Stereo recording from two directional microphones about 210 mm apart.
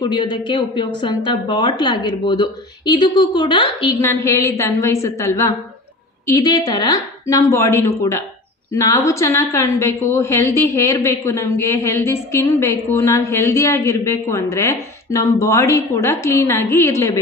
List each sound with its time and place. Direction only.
0.0 s a woman's voice: 20° left (ahead or behind)